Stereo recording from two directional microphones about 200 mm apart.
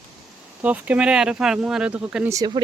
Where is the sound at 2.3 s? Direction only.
20° right (ahead or behind).